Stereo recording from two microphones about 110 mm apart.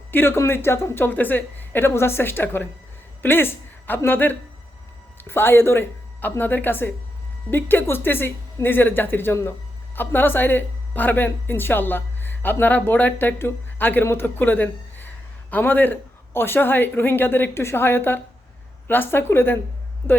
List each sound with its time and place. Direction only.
0.1 s speech: 20° left (ahead or behind)